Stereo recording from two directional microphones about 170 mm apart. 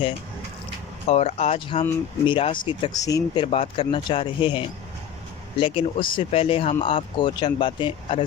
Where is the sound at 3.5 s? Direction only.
35° left (ahead or behind).